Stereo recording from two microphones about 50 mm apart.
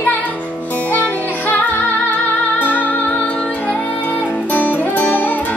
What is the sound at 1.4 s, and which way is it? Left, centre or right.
Music, left.